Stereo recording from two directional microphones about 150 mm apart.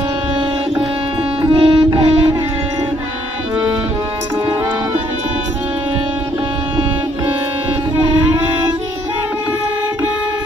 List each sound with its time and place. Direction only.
1.4 s music: 35° right (ahead or behind)